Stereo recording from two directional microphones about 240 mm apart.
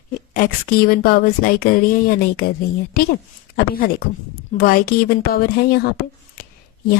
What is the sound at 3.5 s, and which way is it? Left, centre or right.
A woman's voice, left.